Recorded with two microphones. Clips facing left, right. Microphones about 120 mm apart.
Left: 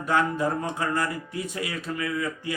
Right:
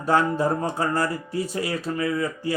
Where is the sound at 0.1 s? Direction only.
35° right (ahead or behind).